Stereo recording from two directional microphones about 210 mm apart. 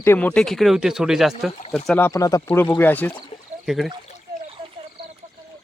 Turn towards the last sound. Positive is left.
turn(degrees=0)  # may be behind; listen again after turning